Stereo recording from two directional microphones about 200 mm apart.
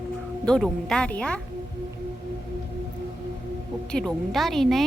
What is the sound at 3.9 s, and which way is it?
Speech, 5° left (ahead or behind).